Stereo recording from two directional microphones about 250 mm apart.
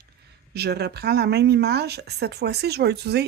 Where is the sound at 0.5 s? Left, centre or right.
Right.